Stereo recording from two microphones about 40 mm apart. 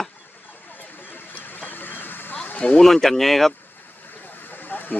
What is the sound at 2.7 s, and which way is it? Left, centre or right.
Speech, centre.